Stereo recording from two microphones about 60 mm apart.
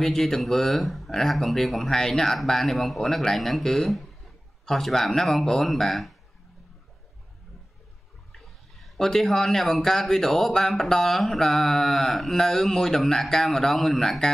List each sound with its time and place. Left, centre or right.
0.0 s speech: centre
8.3 s speech: centre